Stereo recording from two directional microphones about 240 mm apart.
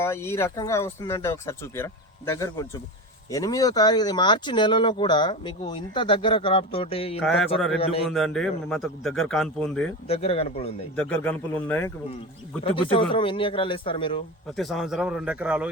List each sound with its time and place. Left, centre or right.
0.0 s speech: centre
8.1 s a man's voice: centre
10.1 s speech: left
10.9 s speech: centre
12.6 s speech: left
14.5 s a man's voice: centre